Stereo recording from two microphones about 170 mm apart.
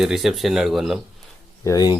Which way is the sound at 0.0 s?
Centre (ahead or behind).